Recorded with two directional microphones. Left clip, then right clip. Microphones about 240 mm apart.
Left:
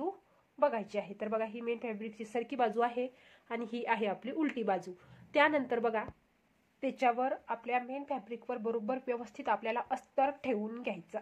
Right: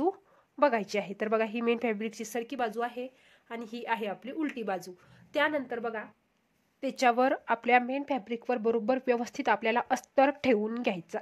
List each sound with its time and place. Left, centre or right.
0.6 s speech: right
2.4 s a woman's voice: centre
7.0 s speech: right